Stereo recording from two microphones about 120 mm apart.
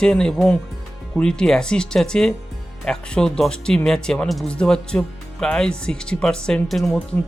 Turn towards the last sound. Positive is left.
turn(degrees=0)  # may be behind; listen again after turning